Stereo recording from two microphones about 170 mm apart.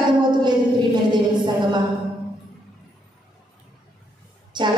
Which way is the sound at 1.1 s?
25° right (ahead or behind).